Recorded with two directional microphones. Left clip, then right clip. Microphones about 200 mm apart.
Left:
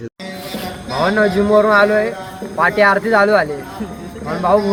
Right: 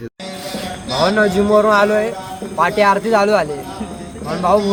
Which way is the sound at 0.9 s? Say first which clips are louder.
Even; 20° right (ahead or behind).